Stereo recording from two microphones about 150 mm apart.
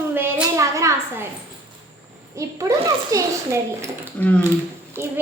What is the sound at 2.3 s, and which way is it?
A child's voice, 20° right (ahead or behind).